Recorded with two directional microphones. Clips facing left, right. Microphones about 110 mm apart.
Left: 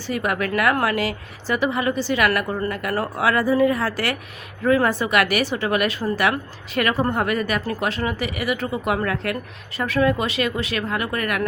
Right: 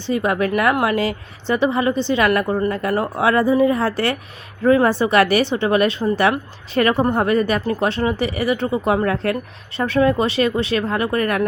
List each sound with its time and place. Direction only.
0.0 s a woman's voice: 25° right (ahead or behind)